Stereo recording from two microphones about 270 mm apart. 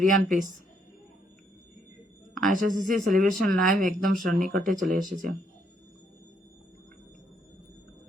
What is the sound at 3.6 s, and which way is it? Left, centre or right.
Speech, right.